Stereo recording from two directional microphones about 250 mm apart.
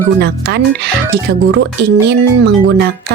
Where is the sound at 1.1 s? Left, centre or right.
Right.